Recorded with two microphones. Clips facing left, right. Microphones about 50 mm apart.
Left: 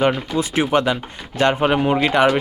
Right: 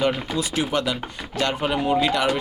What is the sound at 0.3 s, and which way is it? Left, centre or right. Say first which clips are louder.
Speech: left 6 dB; left.